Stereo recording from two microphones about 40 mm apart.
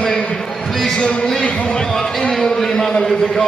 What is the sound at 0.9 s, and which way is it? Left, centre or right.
A man's voice, left.